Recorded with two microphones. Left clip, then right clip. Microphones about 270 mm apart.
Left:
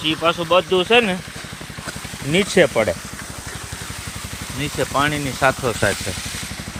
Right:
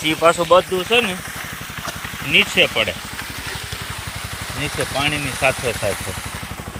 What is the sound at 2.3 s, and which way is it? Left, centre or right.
Speech, left.